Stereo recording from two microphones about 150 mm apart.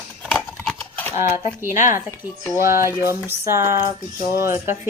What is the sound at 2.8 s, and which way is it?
A woman's voice, 15° right (ahead or behind).